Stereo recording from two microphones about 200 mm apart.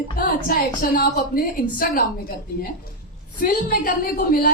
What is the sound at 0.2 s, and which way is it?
A woman's voice, 45° left (ahead or behind).